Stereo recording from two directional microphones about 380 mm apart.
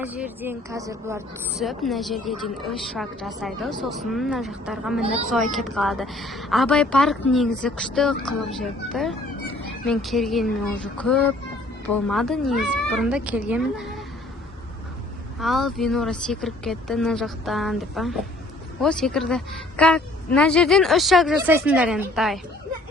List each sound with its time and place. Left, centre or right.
0.0 s a woman's voice: centre
5.0 s speech: centre
5.3 s a woman's voice: centre
15.4 s a woman's voice: centre